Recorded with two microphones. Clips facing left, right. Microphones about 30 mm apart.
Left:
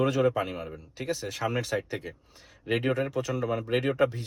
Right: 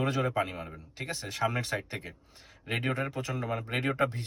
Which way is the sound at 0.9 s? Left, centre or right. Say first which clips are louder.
Left 2 dB; right.